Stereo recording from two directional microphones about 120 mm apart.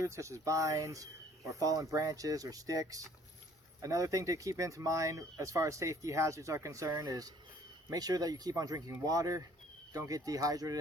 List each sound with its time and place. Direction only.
0.0 s speech: 25° right (ahead or behind)